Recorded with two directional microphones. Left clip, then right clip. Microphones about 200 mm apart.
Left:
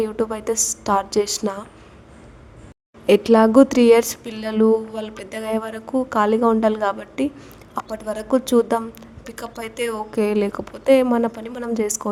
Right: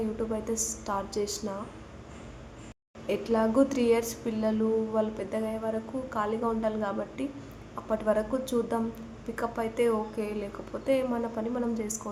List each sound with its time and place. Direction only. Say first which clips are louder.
0.2 s a woman's voice: left 10 dB; 55° left (ahead or behind)
3.1 s a woman's voice: left 13 dB; 55° left (ahead or behind)
7.9 s a woman's voice: right 4 dB; centre (ahead or behind)
8.3 s a woman's voice: left 12 dB; 55° left (ahead or behind)